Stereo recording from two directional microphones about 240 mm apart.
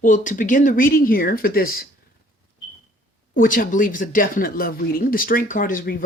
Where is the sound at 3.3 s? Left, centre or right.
Left.